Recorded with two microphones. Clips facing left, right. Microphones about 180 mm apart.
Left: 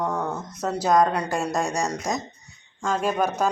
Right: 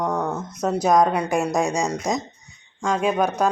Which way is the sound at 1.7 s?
Centre (ahead or behind).